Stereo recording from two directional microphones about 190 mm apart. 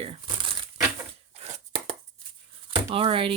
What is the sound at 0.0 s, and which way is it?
Crumpling, 30° right (ahead or behind).